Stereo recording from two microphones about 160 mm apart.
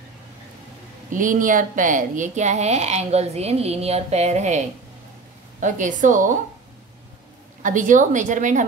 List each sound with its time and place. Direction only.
1.1 s speech: 55° right (ahead or behind)
7.6 s speech: 55° right (ahead or behind)